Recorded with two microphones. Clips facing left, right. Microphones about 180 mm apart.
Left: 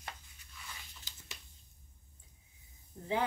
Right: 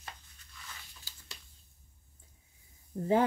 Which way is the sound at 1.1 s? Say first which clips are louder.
Left 1 dB; 20° left (ahead or behind).